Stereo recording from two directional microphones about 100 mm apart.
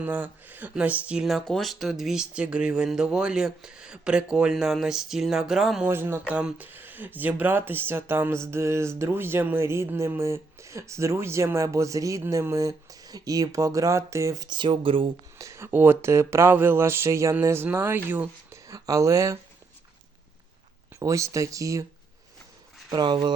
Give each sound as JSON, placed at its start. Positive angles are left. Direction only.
{"t": 0.0, "sound": "speech", "side_deg": -20}
{"t": 1.2, "sound": "speech", "side_deg": 0}
{"t": 5.9, "sound": "speech", "side_deg": -25}
{"t": 6.2, "sound": "speech", "side_deg": -10}
{"t": 14.4, "sound": "speech", "side_deg": -50}
{"t": 15.4, "sound": "speech", "side_deg": -30}
{"t": 18.7, "sound": "speech", "side_deg": -35}
{"t": 21.0, "sound": "speech", "side_deg": -30}
{"t": 22.9, "sound": "speech", "side_deg": -50}